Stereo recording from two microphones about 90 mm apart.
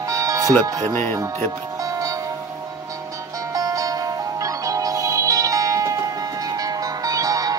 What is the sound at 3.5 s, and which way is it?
Music, 40° right (ahead or behind).